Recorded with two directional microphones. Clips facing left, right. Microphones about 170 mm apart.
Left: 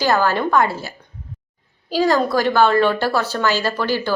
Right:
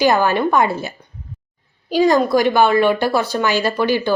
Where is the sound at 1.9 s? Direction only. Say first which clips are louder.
Right 3 dB; 15° right (ahead or behind).